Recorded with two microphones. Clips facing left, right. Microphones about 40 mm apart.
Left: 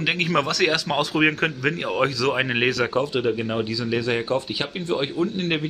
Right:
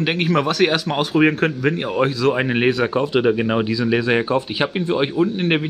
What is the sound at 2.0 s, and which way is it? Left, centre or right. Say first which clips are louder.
Speech: right 4 dB; right.